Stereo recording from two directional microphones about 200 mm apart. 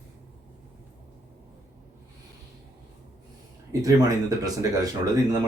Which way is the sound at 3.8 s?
15° right (ahead or behind).